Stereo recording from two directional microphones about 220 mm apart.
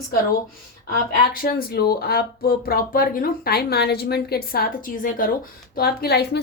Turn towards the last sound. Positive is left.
turn(degrees=45)  # may be behind; listen again after turning